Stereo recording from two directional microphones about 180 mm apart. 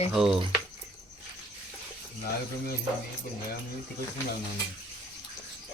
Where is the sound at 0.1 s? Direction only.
Centre (ahead or behind).